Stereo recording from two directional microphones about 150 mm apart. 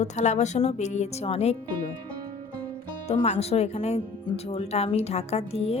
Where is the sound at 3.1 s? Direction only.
50° left (ahead or behind).